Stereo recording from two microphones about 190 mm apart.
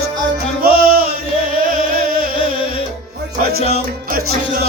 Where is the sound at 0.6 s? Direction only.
50° right (ahead or behind).